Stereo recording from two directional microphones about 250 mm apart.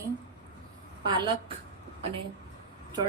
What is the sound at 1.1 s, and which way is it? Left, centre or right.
Speech, centre.